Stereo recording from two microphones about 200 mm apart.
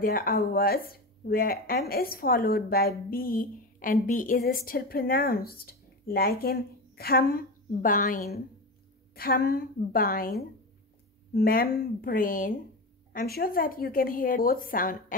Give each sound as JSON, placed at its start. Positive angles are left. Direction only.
{"t": 0.0, "sound": "a woman's voice", "side_deg": 45}